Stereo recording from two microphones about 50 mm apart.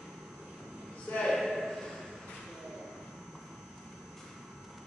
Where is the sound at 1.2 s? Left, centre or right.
Centre.